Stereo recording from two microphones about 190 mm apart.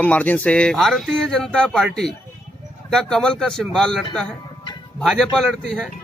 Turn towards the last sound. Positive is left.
turn(degrees=0)  # may be behind; listen again after turning